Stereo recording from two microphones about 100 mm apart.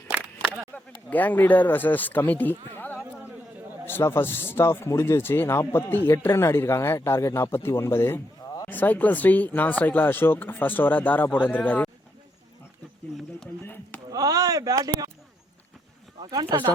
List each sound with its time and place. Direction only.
0.7 s speech: 15° left (ahead or behind)
14.1 s speech: 40° right (ahead or behind)
16.2 s speech: 45° right (ahead or behind)